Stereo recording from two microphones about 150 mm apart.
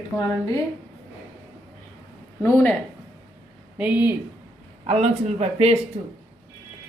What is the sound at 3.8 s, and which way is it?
Speech, 10° right (ahead or behind).